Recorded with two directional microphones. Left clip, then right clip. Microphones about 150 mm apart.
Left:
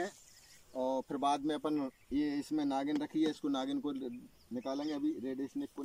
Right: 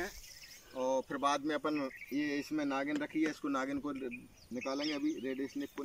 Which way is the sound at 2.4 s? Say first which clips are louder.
Left 1 dB; 35° left (ahead or behind).